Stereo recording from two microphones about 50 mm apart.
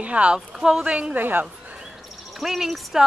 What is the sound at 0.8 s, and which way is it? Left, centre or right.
Speech, right.